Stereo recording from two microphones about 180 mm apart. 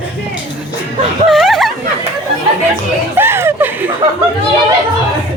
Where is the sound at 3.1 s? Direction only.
15° right (ahead or behind).